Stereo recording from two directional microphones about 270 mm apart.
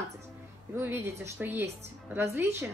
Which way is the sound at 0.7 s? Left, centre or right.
Centre.